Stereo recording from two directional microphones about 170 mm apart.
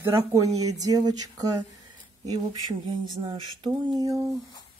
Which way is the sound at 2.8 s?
25° right (ahead or behind).